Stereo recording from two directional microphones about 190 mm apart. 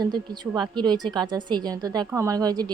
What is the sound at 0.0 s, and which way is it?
A woman's voice, 20° right (ahead or behind).